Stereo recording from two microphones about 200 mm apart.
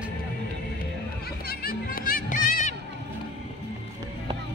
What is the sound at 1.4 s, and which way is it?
Music, 45° left (ahead or behind).